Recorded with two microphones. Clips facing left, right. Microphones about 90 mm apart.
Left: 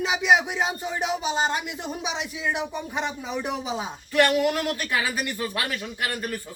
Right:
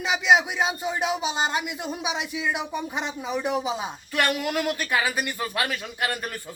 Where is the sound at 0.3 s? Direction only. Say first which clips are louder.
Right 1 dB; 15° right (ahead or behind).